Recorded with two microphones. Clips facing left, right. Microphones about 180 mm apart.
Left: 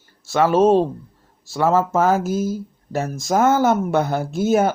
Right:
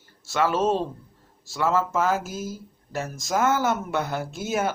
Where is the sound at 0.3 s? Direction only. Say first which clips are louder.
Left 8 dB; 55° left (ahead or behind).